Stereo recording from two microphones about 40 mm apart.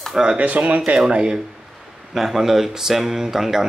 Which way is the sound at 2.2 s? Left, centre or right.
Centre.